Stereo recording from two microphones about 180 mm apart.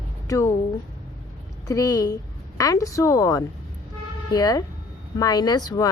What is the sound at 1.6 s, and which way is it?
A woman's voice, 20° left (ahead or behind).